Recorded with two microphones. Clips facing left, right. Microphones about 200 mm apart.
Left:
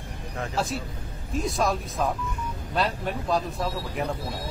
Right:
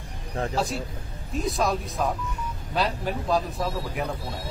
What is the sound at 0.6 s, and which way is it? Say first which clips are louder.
Speech: right 1 dB; centre (ahead or behind).